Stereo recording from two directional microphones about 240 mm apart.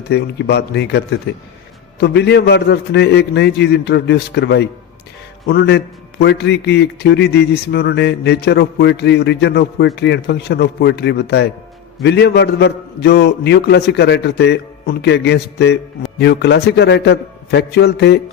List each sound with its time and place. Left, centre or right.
0.1 s a man's voice: left